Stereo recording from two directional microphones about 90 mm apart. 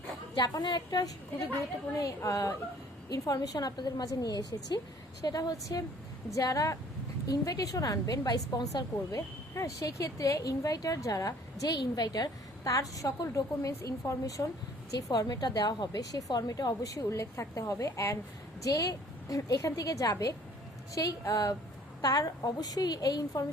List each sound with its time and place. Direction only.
0.3 s a woman's voice: 50° left (ahead or behind)